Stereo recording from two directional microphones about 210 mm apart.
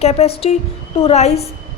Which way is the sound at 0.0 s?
30° left (ahead or behind).